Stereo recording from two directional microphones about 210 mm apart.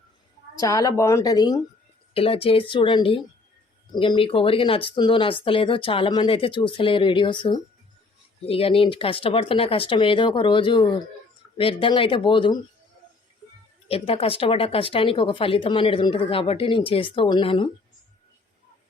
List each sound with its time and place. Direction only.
0.5 s a woman's voice: 15° left (ahead or behind)
13.8 s speech: 30° left (ahead or behind)